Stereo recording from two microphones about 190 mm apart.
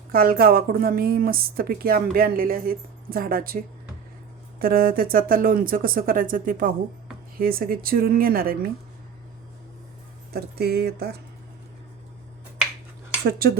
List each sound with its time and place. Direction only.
0.1 s speech: 50° right (ahead or behind)
4.6 s speech: 50° right (ahead or behind)
10.3 s speech: 55° right (ahead or behind)